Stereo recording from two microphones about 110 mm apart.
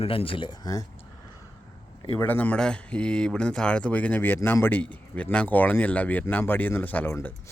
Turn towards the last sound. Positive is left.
turn(degrees=15)  # may be behind; listen again after turning